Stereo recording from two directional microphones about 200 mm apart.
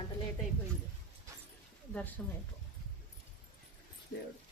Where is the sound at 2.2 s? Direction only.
10° left (ahead or behind).